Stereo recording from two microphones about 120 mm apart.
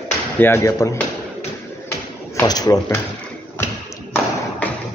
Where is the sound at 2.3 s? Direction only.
35° left (ahead or behind).